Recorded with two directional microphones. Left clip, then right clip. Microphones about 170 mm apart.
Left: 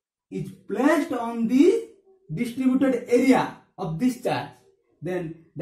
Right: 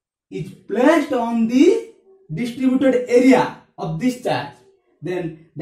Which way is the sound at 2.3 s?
20° left (ahead or behind).